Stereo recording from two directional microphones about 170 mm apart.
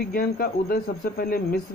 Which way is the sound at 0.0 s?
60° left (ahead or behind).